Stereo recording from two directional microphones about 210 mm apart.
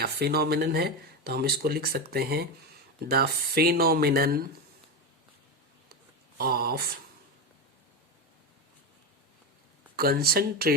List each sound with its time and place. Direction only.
0.0 s speech: 50° right (ahead or behind)
6.3 s speech: 45° right (ahead or behind)
9.9 s speech: 45° right (ahead or behind)